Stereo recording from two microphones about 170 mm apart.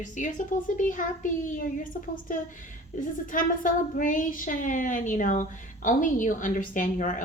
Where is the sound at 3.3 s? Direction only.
50° left (ahead or behind).